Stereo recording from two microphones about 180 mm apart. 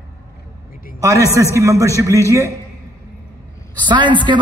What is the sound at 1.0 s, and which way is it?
A man's voice, 15° right (ahead or behind).